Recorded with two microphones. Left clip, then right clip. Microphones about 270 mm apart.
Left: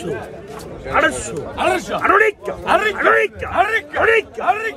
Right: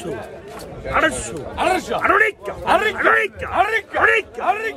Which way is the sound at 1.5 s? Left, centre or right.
Right.